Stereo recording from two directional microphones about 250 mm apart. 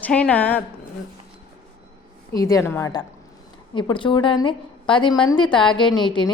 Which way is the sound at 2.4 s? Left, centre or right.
Centre.